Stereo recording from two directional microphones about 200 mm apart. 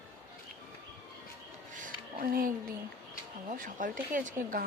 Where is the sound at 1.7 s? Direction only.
45° right (ahead or behind).